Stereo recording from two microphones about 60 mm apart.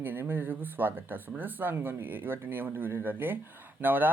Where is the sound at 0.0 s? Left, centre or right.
Right.